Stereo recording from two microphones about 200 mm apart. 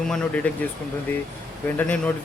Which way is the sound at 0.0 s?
5° left (ahead or behind).